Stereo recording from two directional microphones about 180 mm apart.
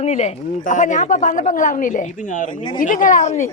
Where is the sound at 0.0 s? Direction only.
35° left (ahead or behind).